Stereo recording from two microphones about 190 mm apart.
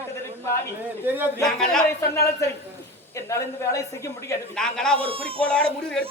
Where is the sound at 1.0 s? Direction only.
10° right (ahead or behind).